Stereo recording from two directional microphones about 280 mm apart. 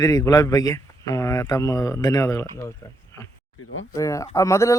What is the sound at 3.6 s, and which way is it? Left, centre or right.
Speech, left.